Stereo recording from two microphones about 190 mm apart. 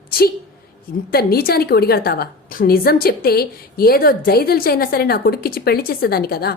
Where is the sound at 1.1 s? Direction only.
55° left (ahead or behind).